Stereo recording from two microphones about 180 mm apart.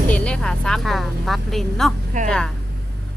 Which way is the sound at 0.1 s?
5° left (ahead or behind).